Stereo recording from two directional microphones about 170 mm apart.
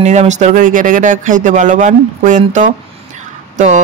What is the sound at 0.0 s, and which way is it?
Speech, 45° right (ahead or behind).